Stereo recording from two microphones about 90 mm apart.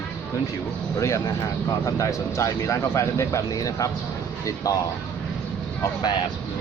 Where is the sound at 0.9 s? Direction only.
35° left (ahead or behind).